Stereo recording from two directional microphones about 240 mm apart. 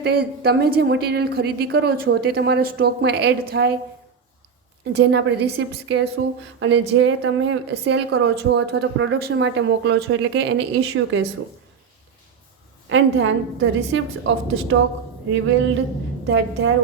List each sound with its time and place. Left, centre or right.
0.0 s a woman's voice: right
4.9 s a woman's voice: right
12.9 s a woman's voice: right